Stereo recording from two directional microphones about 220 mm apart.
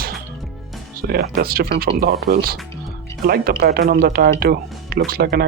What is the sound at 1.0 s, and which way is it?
Speech, 45° right (ahead or behind).